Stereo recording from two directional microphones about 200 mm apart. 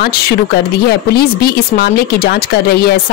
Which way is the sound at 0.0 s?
55° left (ahead or behind).